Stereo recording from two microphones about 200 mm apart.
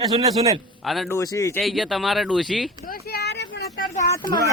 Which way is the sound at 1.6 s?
Centre (ahead or behind).